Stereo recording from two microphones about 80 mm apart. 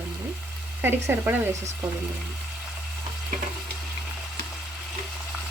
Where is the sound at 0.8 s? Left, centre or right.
Right.